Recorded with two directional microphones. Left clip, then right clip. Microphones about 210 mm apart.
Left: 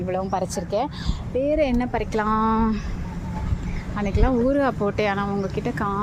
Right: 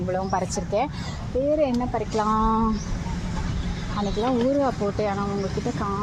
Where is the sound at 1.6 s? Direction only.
20° left (ahead or behind).